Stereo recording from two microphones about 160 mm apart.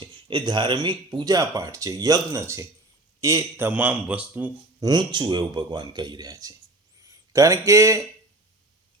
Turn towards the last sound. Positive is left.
turn(degrees=-20)  # may be behind; listen again after turning